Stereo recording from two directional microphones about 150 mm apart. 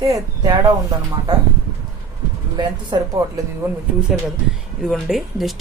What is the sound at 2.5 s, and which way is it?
Speech, 30° right (ahead or behind).